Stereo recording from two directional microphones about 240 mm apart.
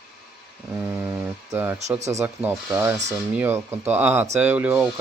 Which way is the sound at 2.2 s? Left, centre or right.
Centre.